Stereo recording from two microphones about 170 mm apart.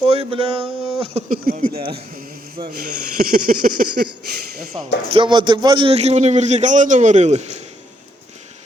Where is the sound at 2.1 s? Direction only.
55° right (ahead or behind).